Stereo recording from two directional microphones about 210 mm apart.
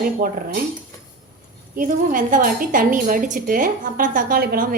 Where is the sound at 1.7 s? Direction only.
40° right (ahead or behind).